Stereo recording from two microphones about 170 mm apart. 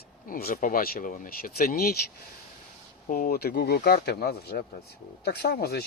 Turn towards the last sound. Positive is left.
turn(degrees=70)  # may be behind; listen again after turning